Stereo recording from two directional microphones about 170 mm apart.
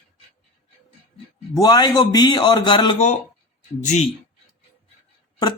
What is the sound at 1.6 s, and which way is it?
Speech, 25° left (ahead or behind).